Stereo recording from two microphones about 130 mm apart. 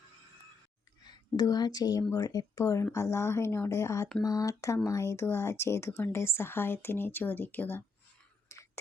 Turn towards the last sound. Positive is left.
turn(degrees=15)  # may be behind; listen again after turning